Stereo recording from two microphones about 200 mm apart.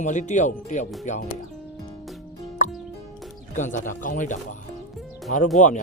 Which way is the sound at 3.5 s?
40° left (ahead or behind).